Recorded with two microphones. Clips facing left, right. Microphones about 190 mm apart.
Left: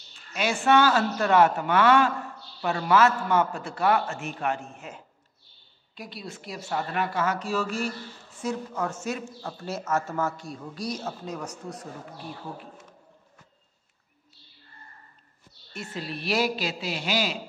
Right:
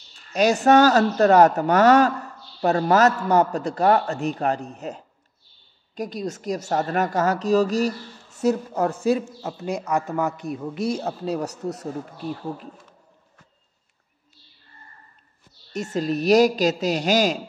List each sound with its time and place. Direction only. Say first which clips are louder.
0.3 s a woman's voice: right 6 dB; 40° right (ahead or behind)
9.4 s a man's voice: right 6 dB; 20° right (ahead or behind); by 11.9 s 40° right (ahead or behind)
15.7 s a woman's voice: right 11 dB; 45° right (ahead or behind)